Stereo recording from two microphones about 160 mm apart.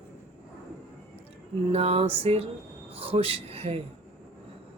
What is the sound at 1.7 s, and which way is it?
Mantra, 40° right (ahead or behind).